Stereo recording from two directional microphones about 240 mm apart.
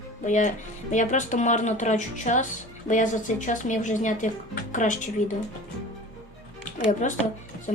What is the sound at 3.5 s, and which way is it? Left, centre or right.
Speech, left.